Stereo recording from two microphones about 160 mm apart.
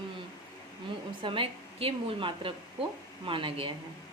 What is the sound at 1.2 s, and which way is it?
A woman's voice, 35° right (ahead or behind).